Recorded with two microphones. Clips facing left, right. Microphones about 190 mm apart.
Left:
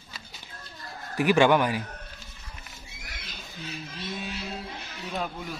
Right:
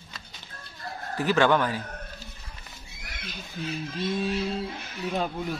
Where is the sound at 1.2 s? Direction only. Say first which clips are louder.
Left 2 dB; 15° left (ahead or behind).